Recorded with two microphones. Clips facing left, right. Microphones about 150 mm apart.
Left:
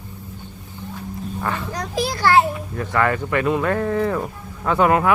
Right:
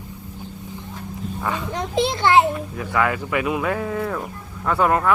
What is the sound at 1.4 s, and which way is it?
Children playing, 15° right (ahead or behind).